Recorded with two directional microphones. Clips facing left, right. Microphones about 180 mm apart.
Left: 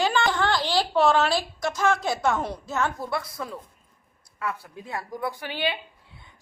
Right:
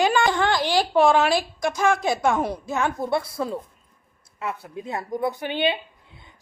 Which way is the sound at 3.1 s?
25° right (ahead or behind).